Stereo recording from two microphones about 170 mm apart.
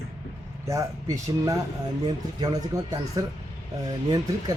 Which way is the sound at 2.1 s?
25° right (ahead or behind).